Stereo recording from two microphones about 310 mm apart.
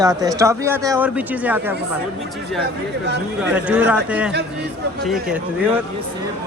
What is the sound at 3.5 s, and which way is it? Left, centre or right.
Speech, centre.